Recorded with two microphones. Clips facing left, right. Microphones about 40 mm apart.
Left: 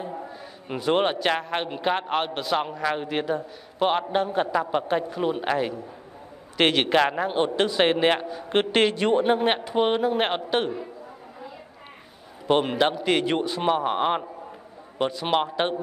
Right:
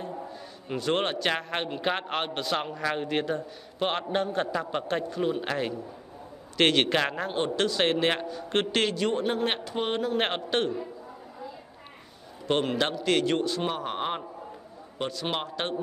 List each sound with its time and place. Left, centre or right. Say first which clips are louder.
0.0 s a man's voice: left 3 dB; centre
8.8 s a man's voice: left 6 dB; left
10.1 s speech: left 3 dB; centre
12.4 s a man's voice: left 5 dB; centre